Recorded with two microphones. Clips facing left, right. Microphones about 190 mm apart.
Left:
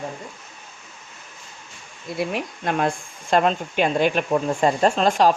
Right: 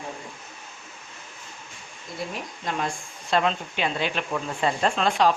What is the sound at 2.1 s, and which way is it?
Speech, 65° left (ahead or behind).